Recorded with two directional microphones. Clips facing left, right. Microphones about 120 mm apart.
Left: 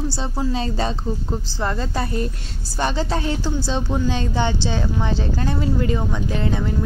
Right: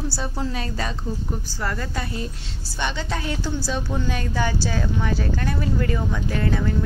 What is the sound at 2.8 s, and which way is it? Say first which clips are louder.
Speech: left 5 dB; 35° left (ahead or behind).